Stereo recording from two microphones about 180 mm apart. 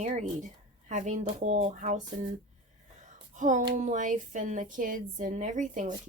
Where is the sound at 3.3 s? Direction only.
45° right (ahead or behind).